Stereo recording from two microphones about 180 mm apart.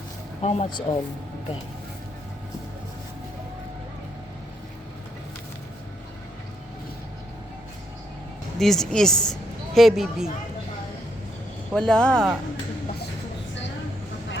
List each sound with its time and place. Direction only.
0.4 s speech: 35° left (ahead or behind)
8.5 s speech: centre (ahead or behind)
11.7 s speech: 5° left (ahead or behind)